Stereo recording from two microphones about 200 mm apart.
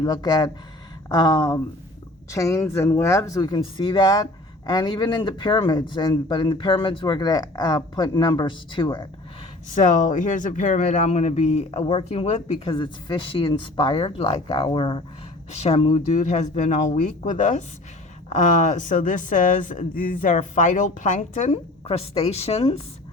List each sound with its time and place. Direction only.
0.0 s speech: 20° left (ahead or behind)
9.6 s speech: 40° left (ahead or behind)